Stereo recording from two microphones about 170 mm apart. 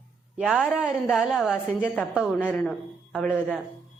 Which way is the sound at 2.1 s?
5° right (ahead or behind).